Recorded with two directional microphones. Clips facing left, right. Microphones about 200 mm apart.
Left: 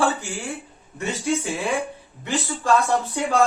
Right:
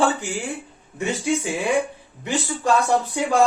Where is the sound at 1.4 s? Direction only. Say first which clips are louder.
Right 3 dB; 15° right (ahead or behind).